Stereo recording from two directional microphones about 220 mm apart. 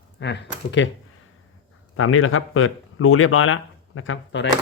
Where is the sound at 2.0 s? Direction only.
70° left (ahead or behind).